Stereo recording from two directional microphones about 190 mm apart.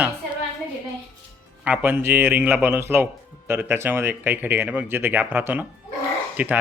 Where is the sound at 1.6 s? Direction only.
10° right (ahead or behind).